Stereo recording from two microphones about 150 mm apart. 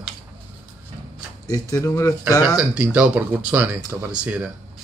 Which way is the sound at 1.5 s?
20° left (ahead or behind).